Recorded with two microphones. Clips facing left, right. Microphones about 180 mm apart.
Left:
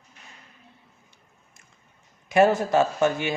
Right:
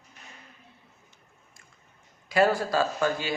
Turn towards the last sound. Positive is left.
turn(degrees=20)  # may be behind; listen again after turning